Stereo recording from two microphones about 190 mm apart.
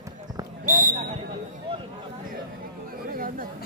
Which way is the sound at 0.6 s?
50° right (ahead or behind).